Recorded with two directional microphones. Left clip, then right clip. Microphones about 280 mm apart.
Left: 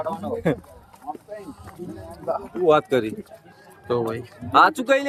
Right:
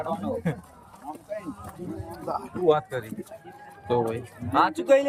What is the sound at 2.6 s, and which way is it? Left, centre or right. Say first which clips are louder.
Speech: left 5 dB; left.